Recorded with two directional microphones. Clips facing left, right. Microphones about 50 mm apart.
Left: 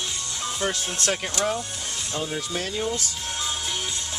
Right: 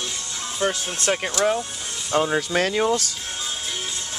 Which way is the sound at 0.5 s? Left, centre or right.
Centre.